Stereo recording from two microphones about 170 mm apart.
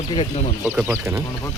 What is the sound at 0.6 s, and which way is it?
Speech, 10° right (ahead or behind).